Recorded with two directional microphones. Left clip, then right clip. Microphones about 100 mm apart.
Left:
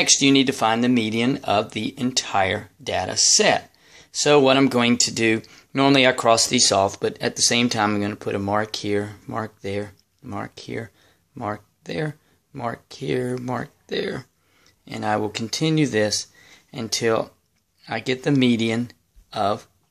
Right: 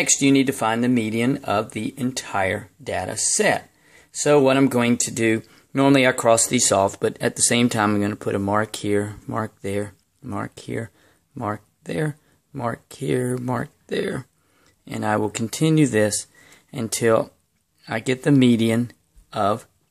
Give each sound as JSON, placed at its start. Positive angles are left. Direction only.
{"t": 0.0, "sound": "speech", "side_deg": -25}